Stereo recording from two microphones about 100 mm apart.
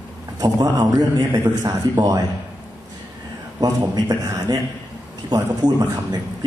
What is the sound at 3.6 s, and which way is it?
Speech, 45° right (ahead or behind).